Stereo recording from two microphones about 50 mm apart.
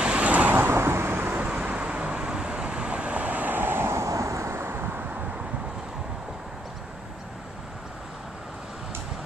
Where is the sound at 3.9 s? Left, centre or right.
Right.